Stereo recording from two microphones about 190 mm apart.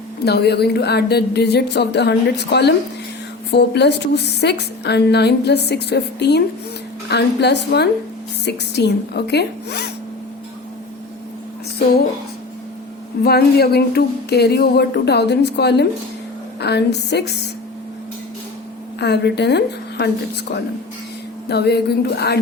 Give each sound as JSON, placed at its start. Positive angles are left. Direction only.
{"t": 0.3, "sound": "a woman's voice", "side_deg": 60}
{"t": 13.2, "sound": "a woman's voice", "side_deg": 55}
{"t": 18.9, "sound": "a woman's voice", "side_deg": 60}
{"t": 21.5, "sound": "a woman's voice", "side_deg": 60}